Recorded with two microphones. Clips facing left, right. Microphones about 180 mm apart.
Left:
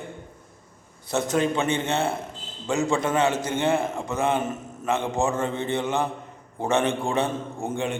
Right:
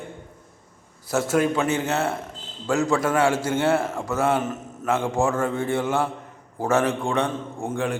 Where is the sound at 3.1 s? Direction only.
20° left (ahead or behind).